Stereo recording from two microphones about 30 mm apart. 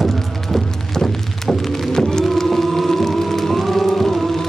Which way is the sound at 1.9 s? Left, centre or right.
Left.